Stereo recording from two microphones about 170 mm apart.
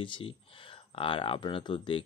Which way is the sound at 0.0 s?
30° left (ahead or behind).